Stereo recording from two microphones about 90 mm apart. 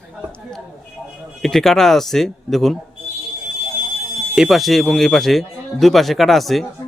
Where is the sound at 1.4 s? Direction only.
5° left (ahead or behind).